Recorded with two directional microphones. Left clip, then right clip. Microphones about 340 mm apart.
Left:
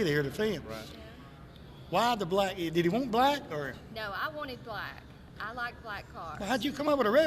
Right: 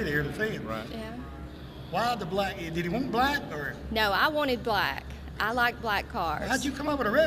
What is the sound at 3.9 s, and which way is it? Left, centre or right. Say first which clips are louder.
Speech: right 14 dB; right.